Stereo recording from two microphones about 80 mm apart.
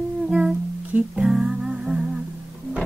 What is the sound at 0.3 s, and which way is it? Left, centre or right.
Humming, centre.